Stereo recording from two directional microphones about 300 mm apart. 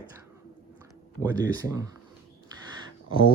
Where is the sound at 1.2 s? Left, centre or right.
Centre.